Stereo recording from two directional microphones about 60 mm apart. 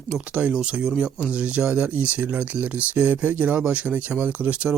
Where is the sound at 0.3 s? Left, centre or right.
Centre.